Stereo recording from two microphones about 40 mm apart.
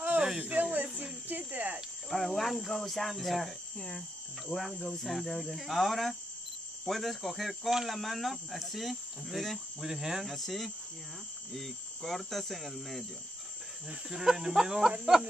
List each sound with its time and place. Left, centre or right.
0.2 s a sound: centre
0.5 s speech: right
2.0 s cricket: centre
3.7 s cricket: left
4.5 s cricket: centre
7.7 s speech: centre
8.0 s cricket: centre
9.8 s speech: centre
10.2 s cricket: centre
14.0 s speech: centre
15.1 s a sound: right